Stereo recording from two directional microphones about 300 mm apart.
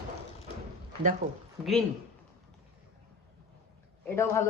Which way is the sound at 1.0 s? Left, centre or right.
Right.